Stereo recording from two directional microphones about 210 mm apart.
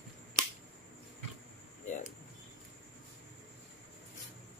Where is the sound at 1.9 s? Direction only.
40° left (ahead or behind).